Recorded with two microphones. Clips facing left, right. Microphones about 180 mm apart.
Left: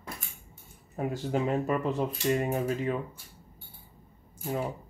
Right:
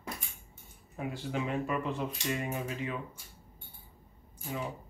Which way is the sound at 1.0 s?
40° left (ahead or behind).